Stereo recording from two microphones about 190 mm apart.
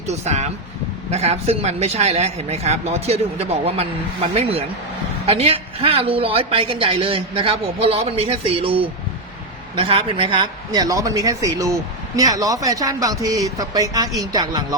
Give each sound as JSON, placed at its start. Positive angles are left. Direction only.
{"t": 0.1, "sound": "a man's voice", "side_deg": -35}